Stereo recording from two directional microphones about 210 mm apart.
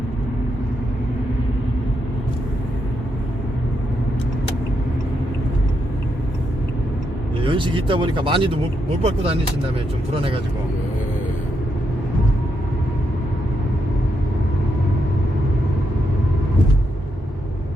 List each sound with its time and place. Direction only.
7.4 s speech: 25° right (ahead or behind)